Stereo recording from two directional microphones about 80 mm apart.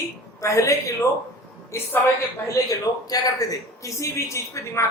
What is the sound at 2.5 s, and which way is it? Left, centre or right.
A man's voice, left.